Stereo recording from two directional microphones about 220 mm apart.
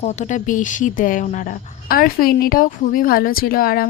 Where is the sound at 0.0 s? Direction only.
30° left (ahead or behind).